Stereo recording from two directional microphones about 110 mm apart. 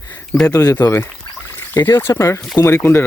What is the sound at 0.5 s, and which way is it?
Speech, 30° left (ahead or behind).